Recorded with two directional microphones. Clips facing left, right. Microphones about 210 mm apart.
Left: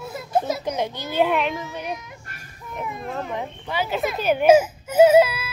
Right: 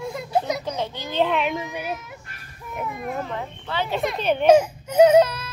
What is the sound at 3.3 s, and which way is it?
Speech, 15° left (ahead or behind).